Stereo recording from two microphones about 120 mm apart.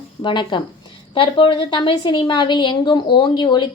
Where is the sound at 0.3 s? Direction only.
40° left (ahead or behind).